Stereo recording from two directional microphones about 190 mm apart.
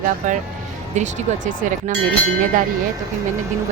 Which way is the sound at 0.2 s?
40° right (ahead or behind).